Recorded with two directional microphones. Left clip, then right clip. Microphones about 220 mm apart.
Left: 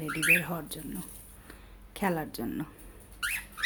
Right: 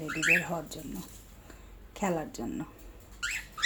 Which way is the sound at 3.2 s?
15° left (ahead or behind).